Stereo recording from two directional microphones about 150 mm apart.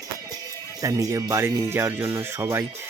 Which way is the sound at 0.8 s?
20° right (ahead or behind).